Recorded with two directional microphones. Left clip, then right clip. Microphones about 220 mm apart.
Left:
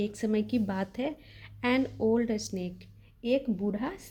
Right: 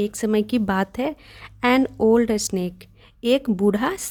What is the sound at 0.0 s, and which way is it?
A woman's voice, 35° right (ahead or behind).